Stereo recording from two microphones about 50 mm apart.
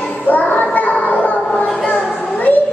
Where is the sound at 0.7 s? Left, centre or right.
Left.